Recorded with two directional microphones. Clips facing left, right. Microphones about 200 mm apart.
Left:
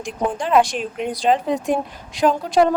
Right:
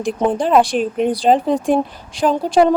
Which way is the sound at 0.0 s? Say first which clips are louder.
Right 6 dB; 35° right (ahead or behind).